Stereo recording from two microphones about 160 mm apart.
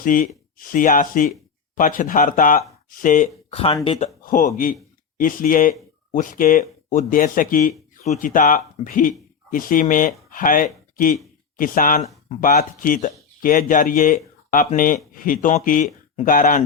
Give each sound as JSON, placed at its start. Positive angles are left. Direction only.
{"t": 0.0, "sound": "speech", "side_deg": 60}
{"t": 3.8, "sound": "speech", "side_deg": 45}
{"t": 4.2, "sound": "speech", "side_deg": 55}